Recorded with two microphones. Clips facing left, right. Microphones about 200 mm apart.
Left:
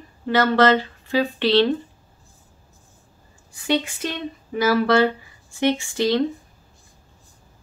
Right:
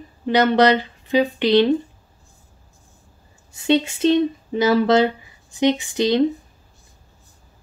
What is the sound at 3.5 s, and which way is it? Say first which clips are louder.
Speech: right 4 dB; 25° right (ahead or behind).